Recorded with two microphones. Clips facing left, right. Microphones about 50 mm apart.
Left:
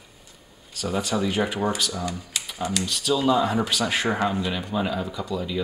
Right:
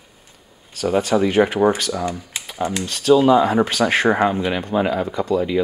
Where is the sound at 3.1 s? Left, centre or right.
Right.